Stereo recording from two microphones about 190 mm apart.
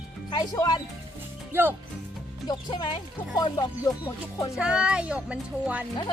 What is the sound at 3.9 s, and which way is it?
Speech, 20° left (ahead or behind).